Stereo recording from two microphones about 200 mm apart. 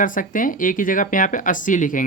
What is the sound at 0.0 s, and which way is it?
Speech, 40° left (ahead or behind).